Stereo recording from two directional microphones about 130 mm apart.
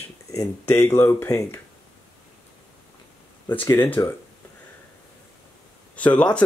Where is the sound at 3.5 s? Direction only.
15° left (ahead or behind).